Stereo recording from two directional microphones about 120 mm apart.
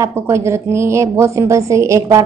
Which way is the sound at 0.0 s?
25° right (ahead or behind).